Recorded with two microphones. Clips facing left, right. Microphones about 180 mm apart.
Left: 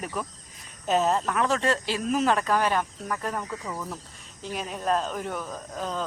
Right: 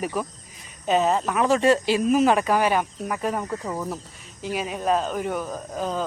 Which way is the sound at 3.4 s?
50° right (ahead or behind).